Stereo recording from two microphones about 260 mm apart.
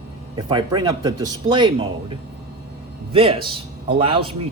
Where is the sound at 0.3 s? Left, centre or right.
Centre.